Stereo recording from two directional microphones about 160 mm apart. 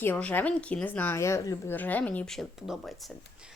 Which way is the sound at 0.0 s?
10° left (ahead or behind).